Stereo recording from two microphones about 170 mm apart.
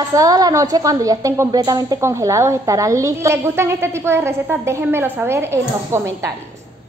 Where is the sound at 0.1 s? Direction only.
20° right (ahead or behind).